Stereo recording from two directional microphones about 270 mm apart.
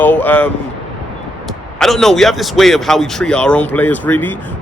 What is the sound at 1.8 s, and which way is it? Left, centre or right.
A man's voice, centre.